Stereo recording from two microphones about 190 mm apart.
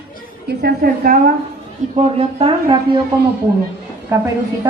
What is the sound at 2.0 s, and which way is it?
Speech, 30° right (ahead or behind).